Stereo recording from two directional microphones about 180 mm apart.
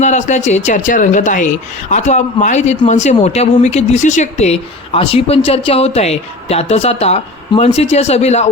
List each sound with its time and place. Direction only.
0.0 s speech: 40° left (ahead or behind)